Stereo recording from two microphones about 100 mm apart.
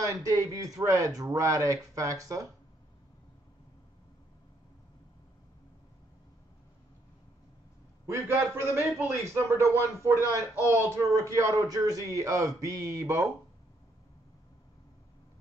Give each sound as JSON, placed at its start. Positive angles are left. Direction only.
{"t": 0.0, "sound": "a man's voice", "side_deg": -30}
{"t": 8.1, "sound": "a man's voice", "side_deg": -20}